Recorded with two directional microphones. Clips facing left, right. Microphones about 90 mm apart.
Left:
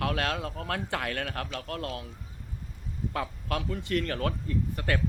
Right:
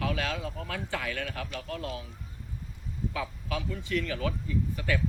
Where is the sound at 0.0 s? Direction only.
55° left (ahead or behind).